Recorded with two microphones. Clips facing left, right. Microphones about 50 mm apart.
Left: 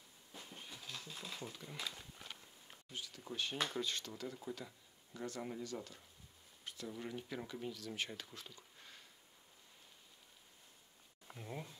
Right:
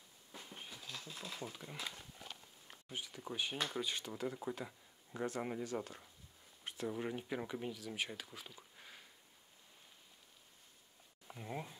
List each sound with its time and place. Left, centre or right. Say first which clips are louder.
0.7 s a sound: left 1 dB; centre
1.3 s speech: right 1 dB; centre
2.7 s speech: right 3 dB; right
3.5 s speech: left 2 dB; centre
3.8 s speech: right 2 dB; centre
11.3 s speech: right 3 dB; centre